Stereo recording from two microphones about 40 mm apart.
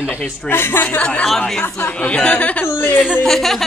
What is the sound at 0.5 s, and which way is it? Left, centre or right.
Speech, left.